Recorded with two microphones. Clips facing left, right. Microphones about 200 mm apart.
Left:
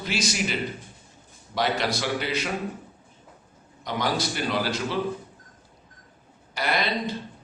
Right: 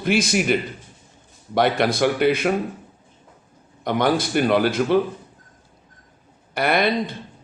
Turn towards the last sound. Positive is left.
turn(degrees=-55)  # may be behind; listen again after turning